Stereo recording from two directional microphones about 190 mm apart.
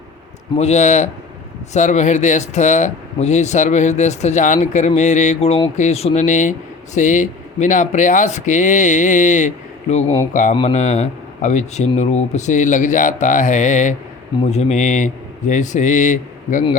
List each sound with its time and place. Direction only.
0.5 s speech: 35° left (ahead or behind)
10.5 s speech: 30° left (ahead or behind)